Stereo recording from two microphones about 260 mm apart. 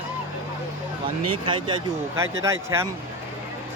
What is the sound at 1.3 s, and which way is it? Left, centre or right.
Speech, centre.